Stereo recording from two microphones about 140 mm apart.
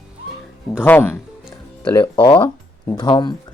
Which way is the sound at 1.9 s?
35° left (ahead or behind).